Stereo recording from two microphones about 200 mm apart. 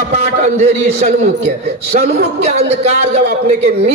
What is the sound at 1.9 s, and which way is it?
A man's voice, 30° right (ahead or behind).